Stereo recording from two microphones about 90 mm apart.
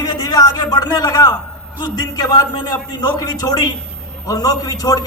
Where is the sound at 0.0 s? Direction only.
50° left (ahead or behind).